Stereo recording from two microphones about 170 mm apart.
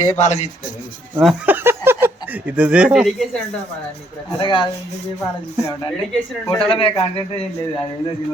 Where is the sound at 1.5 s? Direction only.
10° right (ahead or behind).